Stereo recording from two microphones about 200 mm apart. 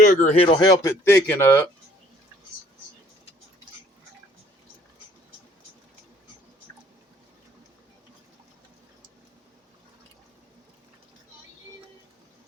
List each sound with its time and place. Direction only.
0.0 s speech: 40° left (ahead or behind); by 1.7 s 15° left (ahead or behind)